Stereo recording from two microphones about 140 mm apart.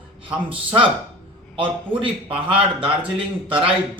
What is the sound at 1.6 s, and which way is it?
Speech, 40° right (ahead or behind).